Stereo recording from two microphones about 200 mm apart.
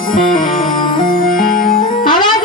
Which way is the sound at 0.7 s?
25° left (ahead or behind).